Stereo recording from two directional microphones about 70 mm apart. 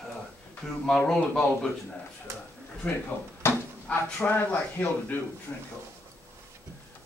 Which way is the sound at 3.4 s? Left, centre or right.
Left.